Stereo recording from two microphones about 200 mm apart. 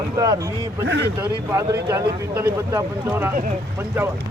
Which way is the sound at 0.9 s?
60° right (ahead or behind).